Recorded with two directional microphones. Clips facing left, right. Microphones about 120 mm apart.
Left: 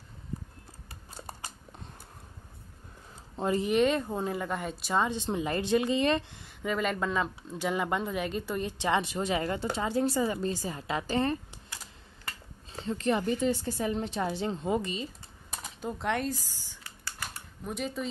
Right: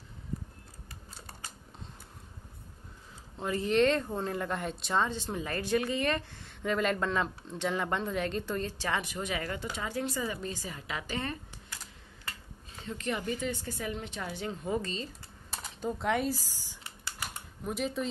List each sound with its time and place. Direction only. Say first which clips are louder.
3.5 s speech: even; 10° left (ahead or behind)
5.1 s speech: left 4 dB; 20° left (ahead or behind)
6.6 s speech: even; 5° left (ahead or behind); by 11.3 s 35° left (ahead or behind)
12.7 s a woman's voice: left 6 dB; 35° left (ahead or behind); by 15.0 s 15° left (ahead or behind)
15.8 s speech: right 1 dB; centre (ahead or behind)